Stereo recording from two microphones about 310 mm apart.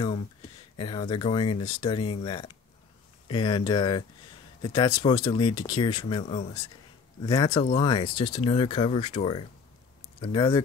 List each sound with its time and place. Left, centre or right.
0.7 s speech: centre